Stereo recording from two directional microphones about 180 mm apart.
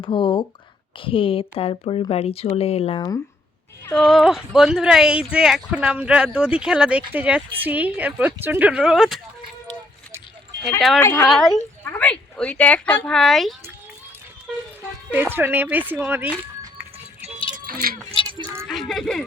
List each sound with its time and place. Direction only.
0.0 s speech: 25° left (ahead or behind)
3.9 s a woman's voice: centre (ahead or behind)
10.8 s speech: centre (ahead or behind)
11.0 s speech: 15° left (ahead or behind)
11.3 s speech: centre (ahead or behind)
15.1 s a woman's voice: 10° right (ahead or behind)
17.2 s music: 35° right (ahead or behind)
17.7 s speech: 55° right (ahead or behind)
18.2 s a sound: 30° left (ahead or behind)
18.7 s speech: centre (ahead or behind)